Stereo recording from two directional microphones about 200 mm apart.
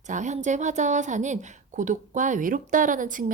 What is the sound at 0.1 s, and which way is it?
A woman's voice, 35° right (ahead or behind).